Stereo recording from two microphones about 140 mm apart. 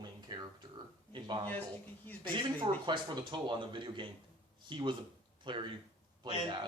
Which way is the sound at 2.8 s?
35° right (ahead or behind).